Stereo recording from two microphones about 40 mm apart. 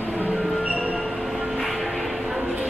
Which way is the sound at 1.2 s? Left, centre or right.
Centre.